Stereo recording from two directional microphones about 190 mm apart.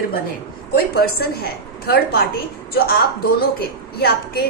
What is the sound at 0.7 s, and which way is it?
A woman's voice, 55° left (ahead or behind).